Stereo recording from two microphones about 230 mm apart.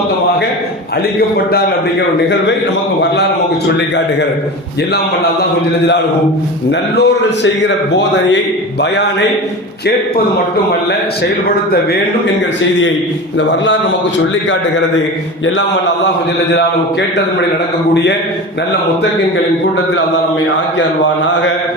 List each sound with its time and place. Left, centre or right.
6.7 s a man's voice: left